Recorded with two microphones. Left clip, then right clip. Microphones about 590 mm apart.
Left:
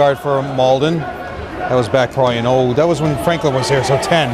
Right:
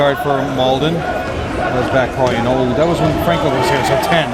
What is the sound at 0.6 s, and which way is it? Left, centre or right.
Speech, left.